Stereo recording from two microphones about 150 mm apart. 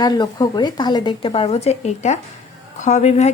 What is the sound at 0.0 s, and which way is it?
A woman's voice, 30° left (ahead or behind).